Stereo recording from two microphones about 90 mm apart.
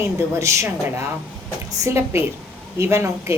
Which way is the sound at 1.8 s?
30° right (ahead or behind).